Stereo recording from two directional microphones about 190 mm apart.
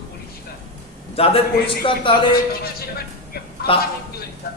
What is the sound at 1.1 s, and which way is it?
A man's voice, 30° left (ahead or behind).